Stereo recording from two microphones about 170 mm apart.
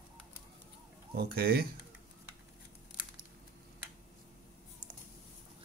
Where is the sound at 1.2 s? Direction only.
65° right (ahead or behind).